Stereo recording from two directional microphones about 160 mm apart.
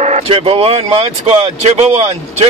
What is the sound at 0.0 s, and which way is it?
A man's voice, 45° right (ahead or behind).